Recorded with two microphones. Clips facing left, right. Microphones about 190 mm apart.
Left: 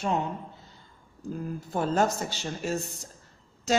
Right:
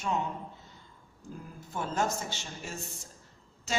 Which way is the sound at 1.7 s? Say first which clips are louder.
Left 6 dB; 35° left (ahead or behind).